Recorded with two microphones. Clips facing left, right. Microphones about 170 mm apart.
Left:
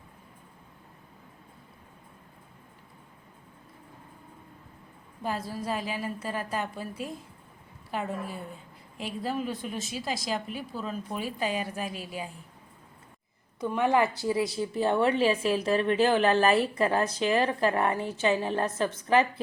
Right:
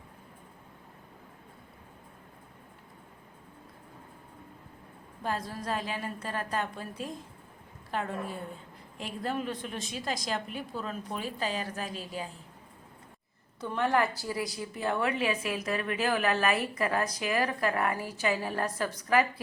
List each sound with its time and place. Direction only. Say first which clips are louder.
5.2 s a woman's voice: left 2 dB; 5° left (ahead or behind)
13.6 s a woman's voice: left 3 dB; 15° left (ahead or behind)